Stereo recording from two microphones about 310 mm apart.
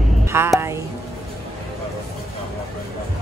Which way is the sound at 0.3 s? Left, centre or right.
Centre.